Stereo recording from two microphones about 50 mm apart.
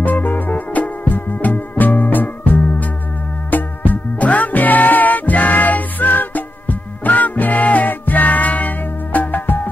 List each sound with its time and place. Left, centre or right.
0.0 s music: left